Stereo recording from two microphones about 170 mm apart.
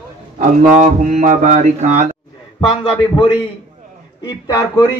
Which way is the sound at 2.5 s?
30° left (ahead or behind).